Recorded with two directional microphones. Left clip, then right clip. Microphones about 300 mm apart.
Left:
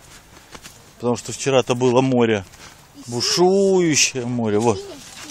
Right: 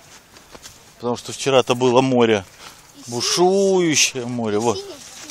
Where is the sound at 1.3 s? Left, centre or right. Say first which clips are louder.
Right 3 dB; centre.